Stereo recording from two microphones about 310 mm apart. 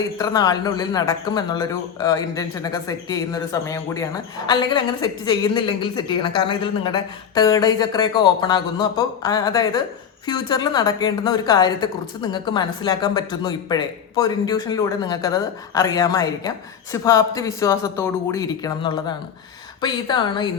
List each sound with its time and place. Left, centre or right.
0.2 s speech: centre